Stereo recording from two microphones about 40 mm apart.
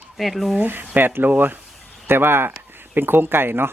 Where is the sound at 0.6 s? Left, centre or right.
Right.